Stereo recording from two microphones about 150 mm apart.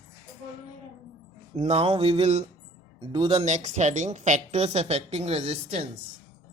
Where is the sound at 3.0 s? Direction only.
30° right (ahead or behind).